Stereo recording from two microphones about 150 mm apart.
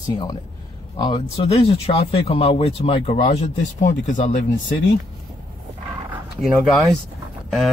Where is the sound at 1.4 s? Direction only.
45° left (ahead or behind).